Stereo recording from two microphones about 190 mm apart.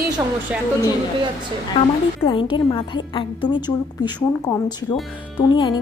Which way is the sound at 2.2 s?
25° left (ahead or behind).